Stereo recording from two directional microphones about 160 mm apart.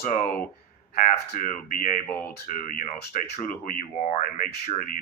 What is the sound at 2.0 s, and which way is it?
Speech, 10° left (ahead or behind).